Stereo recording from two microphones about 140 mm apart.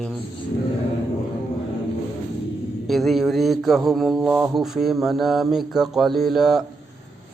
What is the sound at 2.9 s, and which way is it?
Mantra, centre (ahead or behind).